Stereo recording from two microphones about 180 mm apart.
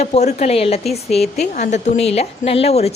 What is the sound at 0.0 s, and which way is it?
A woman's voice, 40° left (ahead or behind).